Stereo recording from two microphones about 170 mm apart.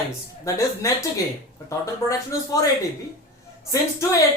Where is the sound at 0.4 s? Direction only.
20° left (ahead or behind).